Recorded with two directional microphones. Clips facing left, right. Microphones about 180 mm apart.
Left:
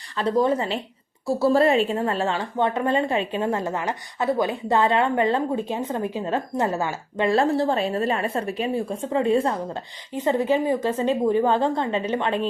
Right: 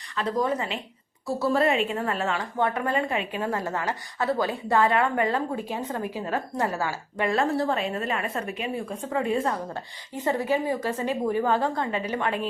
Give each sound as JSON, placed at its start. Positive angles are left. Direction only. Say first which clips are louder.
{"t": 0.2, "sound": "a woman's voice", "louder": "left 5 dB", "side_deg": 30}